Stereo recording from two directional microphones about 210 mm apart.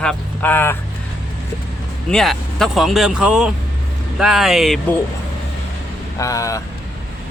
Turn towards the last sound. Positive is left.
turn(degrees=15)  # may be behind; listen again after turning